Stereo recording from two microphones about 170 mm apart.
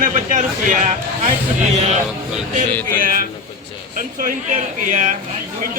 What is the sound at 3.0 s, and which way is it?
A man's voice, 55° right (ahead or behind).